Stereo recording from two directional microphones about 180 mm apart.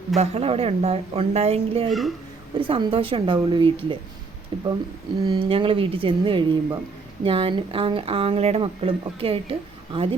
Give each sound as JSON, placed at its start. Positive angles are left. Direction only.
{"t": 0.2, "sound": "speech", "side_deg": -35}
{"t": 1.9, "sound": "speech", "side_deg": 0}
{"t": 2.6, "sound": "a woman's voice", "side_deg": -30}